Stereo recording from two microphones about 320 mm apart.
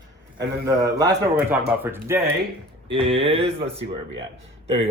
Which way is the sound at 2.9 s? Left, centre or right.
Centre.